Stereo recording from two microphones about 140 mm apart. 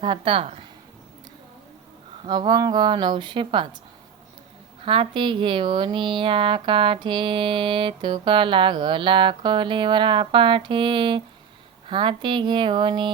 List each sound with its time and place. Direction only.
0.0 s speech: 40° right (ahead or behind)
2.2 s speech: 30° right (ahead or behind)
4.8 s speech: 40° right (ahead or behind)